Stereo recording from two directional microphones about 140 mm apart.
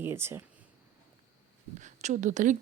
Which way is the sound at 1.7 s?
60° right (ahead or behind).